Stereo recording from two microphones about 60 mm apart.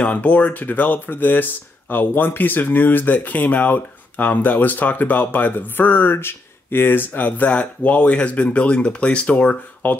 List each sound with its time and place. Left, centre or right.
0.0 s speech: left